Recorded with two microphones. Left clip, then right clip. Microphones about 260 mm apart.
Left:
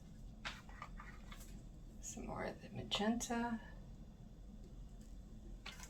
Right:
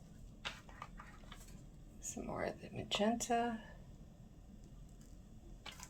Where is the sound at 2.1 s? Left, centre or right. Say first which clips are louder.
Right 4 dB; right.